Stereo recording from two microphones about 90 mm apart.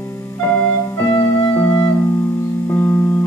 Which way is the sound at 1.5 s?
20° left (ahead or behind).